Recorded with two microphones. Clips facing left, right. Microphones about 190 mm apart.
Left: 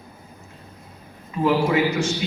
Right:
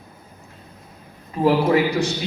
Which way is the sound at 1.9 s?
35° right (ahead or behind).